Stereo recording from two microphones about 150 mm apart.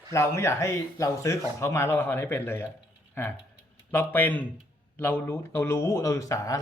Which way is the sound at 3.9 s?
15° left (ahead or behind).